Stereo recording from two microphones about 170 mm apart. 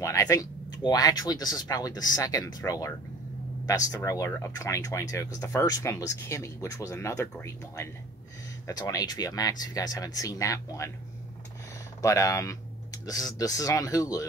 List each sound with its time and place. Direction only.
0.0 s speech: 20° left (ahead or behind)
12.0 s speech: 20° left (ahead or behind)